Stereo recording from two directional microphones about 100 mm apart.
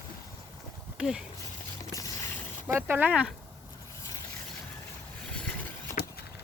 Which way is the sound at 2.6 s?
20° right (ahead or behind).